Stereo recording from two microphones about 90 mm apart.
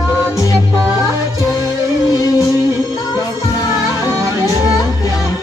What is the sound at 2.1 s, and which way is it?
Music, 35° left (ahead or behind).